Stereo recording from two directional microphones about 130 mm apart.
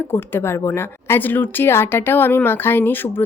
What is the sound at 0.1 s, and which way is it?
Speech, 20° left (ahead or behind).